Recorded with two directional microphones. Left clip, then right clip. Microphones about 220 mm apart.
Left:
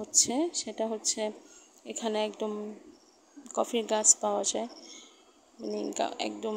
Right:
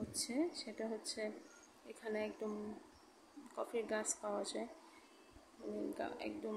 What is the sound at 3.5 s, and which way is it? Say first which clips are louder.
Speech: left 12 dB; 30° left (ahead or behind).